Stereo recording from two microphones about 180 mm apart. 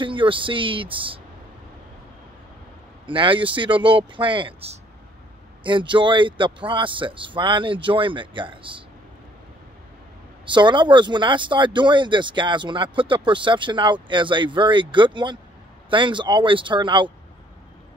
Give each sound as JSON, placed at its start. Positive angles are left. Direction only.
{"t": 0.0, "sound": "speech", "side_deg": -30}
{"t": 3.1, "sound": "speech", "side_deg": -30}
{"t": 10.4, "sound": "speech", "side_deg": -25}